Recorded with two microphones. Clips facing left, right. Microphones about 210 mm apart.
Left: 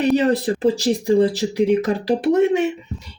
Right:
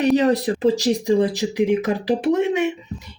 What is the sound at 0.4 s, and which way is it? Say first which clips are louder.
Speech: even; 20° right (ahead or behind).